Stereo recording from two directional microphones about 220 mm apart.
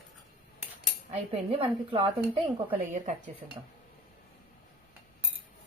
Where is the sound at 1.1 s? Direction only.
25° right (ahead or behind).